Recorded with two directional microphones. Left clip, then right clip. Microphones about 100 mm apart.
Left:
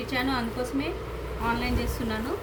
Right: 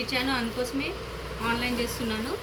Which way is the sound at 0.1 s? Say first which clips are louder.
Left 2 dB; 15° left (ahead or behind).